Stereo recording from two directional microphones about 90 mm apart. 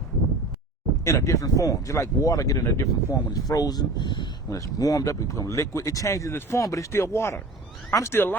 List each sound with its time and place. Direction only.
1.0 s speech: 35° left (ahead or behind); by 4.3 s 55° left (ahead or behind)
4.4 s speech: 40° left (ahead or behind)